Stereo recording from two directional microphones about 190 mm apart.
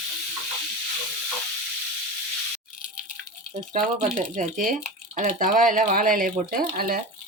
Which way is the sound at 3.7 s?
40° right (ahead or behind).